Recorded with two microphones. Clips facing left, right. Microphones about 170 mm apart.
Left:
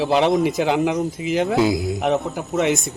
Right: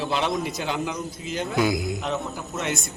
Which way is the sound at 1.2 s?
85° left.